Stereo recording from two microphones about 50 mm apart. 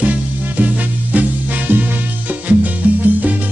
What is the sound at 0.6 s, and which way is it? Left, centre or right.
Music, right.